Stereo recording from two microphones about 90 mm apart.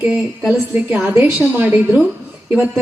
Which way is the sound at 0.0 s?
15° right (ahead or behind).